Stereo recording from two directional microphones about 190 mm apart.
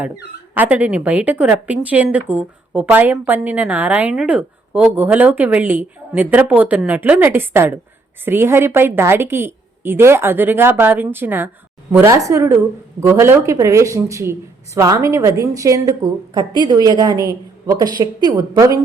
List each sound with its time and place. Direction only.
0.5 s a woman's voice: 10° right (ahead or behind)